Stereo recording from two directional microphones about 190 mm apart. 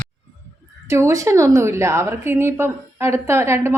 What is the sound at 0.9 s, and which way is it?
A woman's voice, 15° right (ahead or behind).